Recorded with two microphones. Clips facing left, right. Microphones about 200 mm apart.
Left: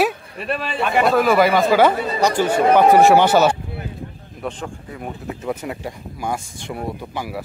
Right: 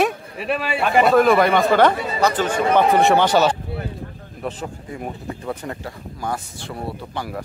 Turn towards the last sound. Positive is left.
turn(degrees=10)  # may be behind; listen again after turning